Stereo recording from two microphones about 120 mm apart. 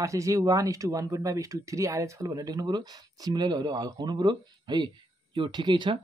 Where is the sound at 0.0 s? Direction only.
25° right (ahead or behind).